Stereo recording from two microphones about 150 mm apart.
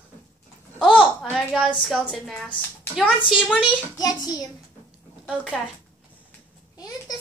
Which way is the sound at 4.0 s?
25° left (ahead or behind).